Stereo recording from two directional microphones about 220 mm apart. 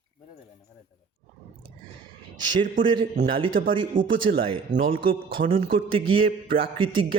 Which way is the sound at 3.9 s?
35° right (ahead or behind).